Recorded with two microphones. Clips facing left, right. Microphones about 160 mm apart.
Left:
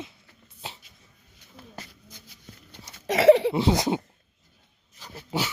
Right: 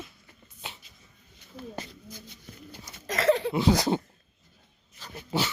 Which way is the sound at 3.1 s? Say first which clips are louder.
Left 8 dB; 70° left (ahead or behind).